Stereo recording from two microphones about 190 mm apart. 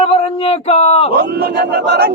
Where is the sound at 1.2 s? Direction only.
55° right (ahead or behind).